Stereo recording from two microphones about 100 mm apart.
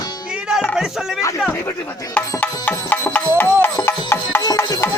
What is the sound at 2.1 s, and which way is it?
Music, 15° left (ahead or behind).